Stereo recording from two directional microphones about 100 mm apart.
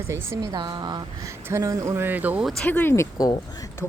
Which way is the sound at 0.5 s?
45° right (ahead or behind).